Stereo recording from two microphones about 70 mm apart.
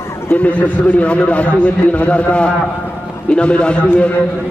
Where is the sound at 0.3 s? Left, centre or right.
Left.